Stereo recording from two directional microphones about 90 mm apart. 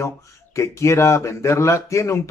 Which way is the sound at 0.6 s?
30° left (ahead or behind).